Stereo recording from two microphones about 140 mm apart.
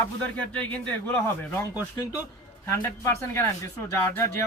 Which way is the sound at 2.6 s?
20° left (ahead or behind).